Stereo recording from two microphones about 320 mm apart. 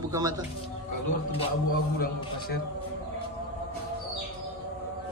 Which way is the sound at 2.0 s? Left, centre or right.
Left.